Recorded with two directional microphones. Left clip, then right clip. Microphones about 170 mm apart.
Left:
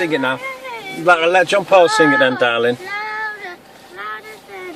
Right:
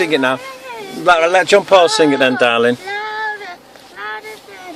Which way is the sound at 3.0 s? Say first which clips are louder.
Right 1 dB; 20° left (ahead or behind).